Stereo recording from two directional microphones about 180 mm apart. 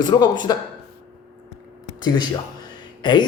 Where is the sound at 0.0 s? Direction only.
25° left (ahead or behind).